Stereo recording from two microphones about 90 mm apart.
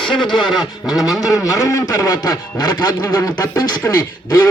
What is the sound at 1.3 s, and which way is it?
A man's voice, 40° left (ahead or behind).